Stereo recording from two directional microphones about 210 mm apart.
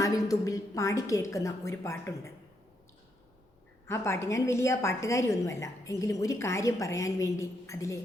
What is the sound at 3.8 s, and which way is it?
A woman's voice, 10° left (ahead or behind).